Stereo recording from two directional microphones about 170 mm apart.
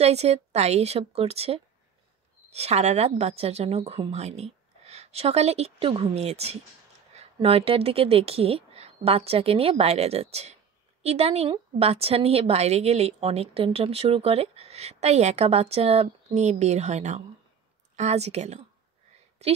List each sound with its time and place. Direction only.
0.0 s a woman's voice: 40° right (ahead or behind)